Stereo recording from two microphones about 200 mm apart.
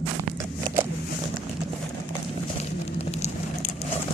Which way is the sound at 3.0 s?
35° left (ahead or behind).